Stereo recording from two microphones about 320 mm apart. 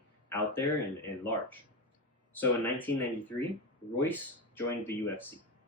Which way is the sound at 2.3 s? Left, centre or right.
Centre.